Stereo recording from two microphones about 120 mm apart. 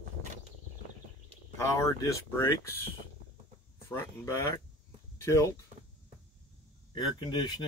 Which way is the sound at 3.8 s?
25° left (ahead or behind).